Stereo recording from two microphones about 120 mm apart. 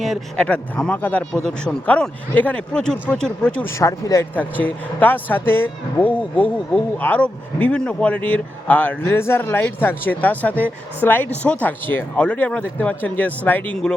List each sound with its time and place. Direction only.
0.0 s speech: 5° left (ahead or behind)
3.8 s speech: 25° left (ahead or behind)
4.4 s speech: 15° left (ahead or behind)